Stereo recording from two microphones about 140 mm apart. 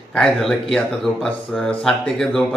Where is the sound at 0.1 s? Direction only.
5° left (ahead or behind).